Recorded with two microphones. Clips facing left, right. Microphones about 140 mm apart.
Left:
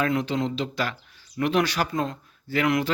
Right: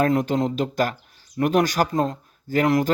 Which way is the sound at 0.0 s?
45° right (ahead or behind).